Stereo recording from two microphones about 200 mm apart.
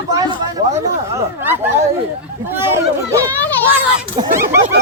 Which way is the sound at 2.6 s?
10° right (ahead or behind).